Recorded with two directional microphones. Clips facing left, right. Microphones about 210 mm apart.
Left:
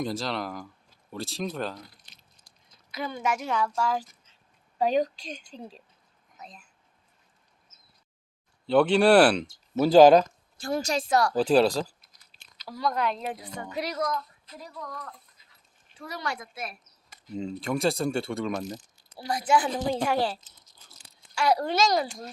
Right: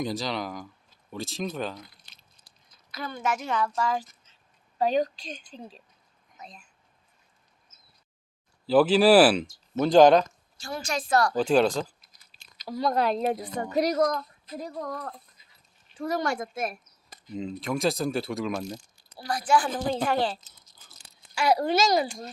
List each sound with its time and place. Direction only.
0.0 s speech: centre (ahead or behind)
2.6 s a woman's voice: 15° left (ahead or behind)
6.3 s a sound: 5° left (ahead or behind)
8.6 s speech: 5° right (ahead or behind)
10.6 s a woman's voice: 45° left (ahead or behind)
11.1 s speech: 10° left (ahead or behind)
12.5 s a woman's voice: 20° right (ahead or behind); by 15.2 s 35° right (ahead or behind)
16.0 s a woman's voice: 45° right (ahead or behind)
17.2 s speech: centre (ahead or behind)
18.6 s speech: 20° left (ahead or behind)
19.6 s a woman's voice: 5° left (ahead or behind)
21.3 s speech: 5° right (ahead or behind)